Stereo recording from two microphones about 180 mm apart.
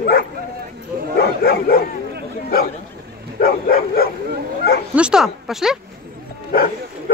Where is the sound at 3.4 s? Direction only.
55° left (ahead or behind).